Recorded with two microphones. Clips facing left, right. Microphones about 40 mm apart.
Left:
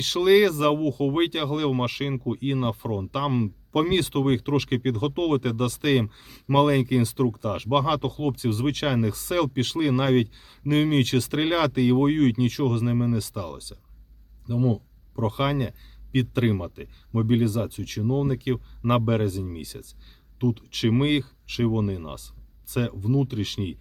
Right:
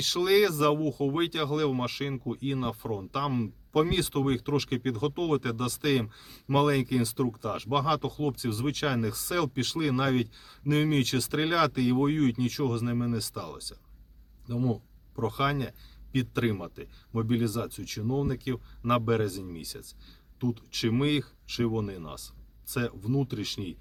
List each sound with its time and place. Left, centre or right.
0.0 s speech: left
3.2 s speech: left
15.1 s speech: left